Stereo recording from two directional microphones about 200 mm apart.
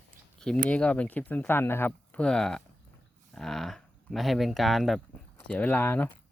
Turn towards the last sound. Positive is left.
turn(degrees=10)  # may be behind; listen again after turning